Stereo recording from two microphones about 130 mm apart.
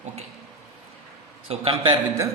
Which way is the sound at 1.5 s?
45° right (ahead or behind).